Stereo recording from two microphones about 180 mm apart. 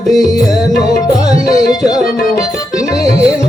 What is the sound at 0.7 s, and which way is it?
Music, 20° left (ahead or behind).